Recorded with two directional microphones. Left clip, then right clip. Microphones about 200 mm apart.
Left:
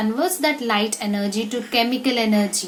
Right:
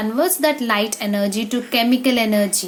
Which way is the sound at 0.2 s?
30° right (ahead or behind).